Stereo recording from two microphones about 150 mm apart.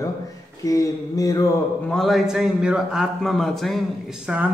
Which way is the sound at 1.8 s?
Centre (ahead or behind).